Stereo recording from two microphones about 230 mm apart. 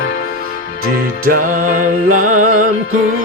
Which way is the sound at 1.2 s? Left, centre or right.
Right.